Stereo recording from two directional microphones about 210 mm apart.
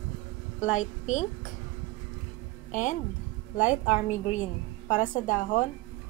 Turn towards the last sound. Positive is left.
turn(degrees=40)  # may be behind; listen again after turning